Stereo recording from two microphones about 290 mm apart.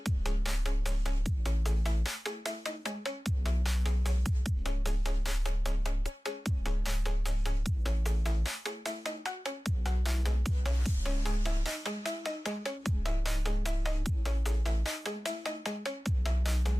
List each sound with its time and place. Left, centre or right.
0.0 s music: centre